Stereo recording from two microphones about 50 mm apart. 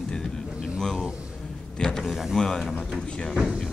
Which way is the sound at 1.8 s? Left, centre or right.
Centre.